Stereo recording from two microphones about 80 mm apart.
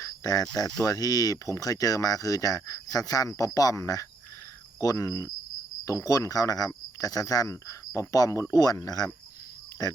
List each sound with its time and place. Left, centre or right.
0.0 s cricket: left
0.5 s speech: left